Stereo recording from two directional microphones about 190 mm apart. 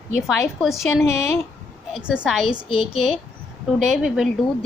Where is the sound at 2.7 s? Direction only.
30° left (ahead or behind).